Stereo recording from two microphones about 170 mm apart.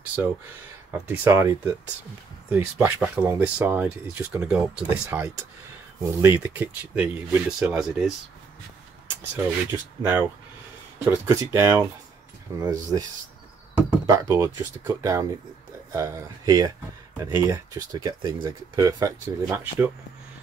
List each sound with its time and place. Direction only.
0.9 s speech: 10° right (ahead or behind)
9.3 s speech: 15° right (ahead or behind)
14.0 s speech: 20° right (ahead or behind)